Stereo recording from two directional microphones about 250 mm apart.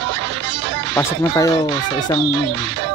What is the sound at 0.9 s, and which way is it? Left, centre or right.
Speech, centre.